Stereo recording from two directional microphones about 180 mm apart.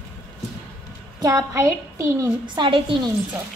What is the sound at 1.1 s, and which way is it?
A woman's voice, 20° right (ahead or behind).